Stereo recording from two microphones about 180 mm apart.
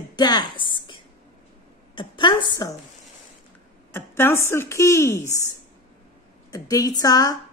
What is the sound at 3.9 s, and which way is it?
Speech, 10° left (ahead or behind).